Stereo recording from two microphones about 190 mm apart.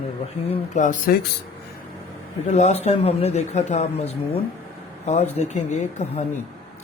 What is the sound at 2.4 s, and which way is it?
Speech, 35° left (ahead or behind).